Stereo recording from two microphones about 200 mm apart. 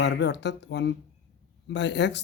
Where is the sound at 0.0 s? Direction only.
60° left (ahead or behind).